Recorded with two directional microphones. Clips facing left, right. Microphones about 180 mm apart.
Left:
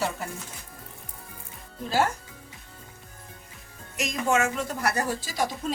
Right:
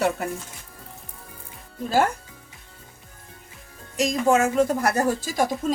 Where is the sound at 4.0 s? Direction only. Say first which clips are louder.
Right 5 dB; 35° right (ahead or behind).